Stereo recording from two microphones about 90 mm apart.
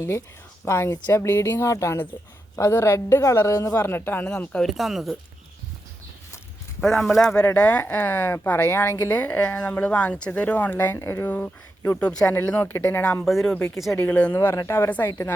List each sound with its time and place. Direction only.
0.0 s a woman's voice: 30° left (ahead or behind)
3.8 s speech: 25° left (ahead or behind)
4.3 s speech: 10° left (ahead or behind)
4.6 s speech: centre (ahead or behind)
6.8 s speech: centre (ahead or behind)
7.4 s speech: 20° left (ahead or behind)
13.2 s speech: centre (ahead or behind)
13.5 s speech: 20° left (ahead or behind)
13.7 s speech: centre (ahead or behind)
14.0 s speech: 15° left (ahead or behind)
14.3 s a woman's voice: 35° left (ahead or behind)
14.8 s speech: 20° left (ahead or behind)